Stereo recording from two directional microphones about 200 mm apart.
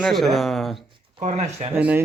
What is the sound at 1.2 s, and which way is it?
Speech, 35° right (ahead or behind).